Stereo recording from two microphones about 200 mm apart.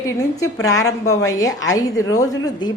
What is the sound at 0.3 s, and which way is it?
A woman's voice, 15° left (ahead or behind).